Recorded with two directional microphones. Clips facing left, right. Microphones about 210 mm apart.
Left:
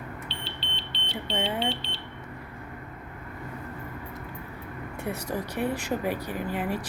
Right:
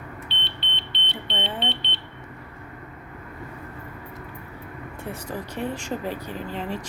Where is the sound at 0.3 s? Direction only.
35° left (ahead or behind).